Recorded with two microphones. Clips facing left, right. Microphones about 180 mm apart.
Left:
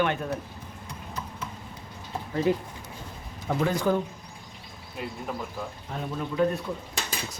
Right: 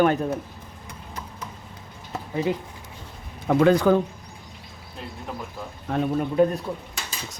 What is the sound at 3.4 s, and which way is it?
Speech, 70° right (ahead or behind).